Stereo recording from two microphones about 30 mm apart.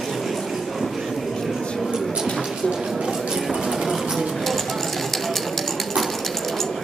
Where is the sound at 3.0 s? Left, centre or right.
Right.